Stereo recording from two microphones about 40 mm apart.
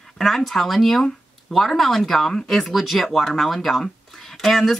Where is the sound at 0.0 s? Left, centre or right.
Centre.